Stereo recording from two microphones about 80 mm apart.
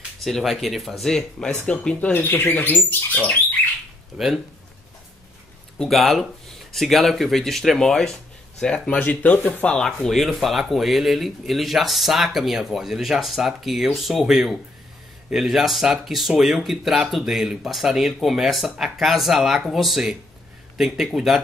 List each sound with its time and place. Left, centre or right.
0.2 s speech: centre; by 3.3 s left
4.1 s speech: centre
5.8 s speech: centre
9.8 s speech: centre